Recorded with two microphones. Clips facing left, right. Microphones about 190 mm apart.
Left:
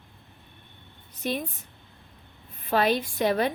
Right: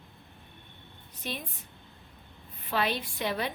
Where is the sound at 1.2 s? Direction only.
45° left (ahead or behind).